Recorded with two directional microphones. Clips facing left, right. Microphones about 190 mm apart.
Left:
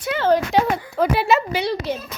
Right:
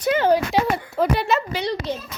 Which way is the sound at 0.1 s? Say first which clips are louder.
Right 1 dB; 15° right (ahead or behind).